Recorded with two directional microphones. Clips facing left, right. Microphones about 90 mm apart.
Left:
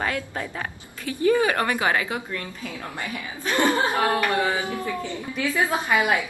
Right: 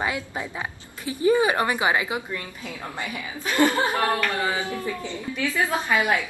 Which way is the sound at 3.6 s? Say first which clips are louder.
Even; 15° left (ahead or behind).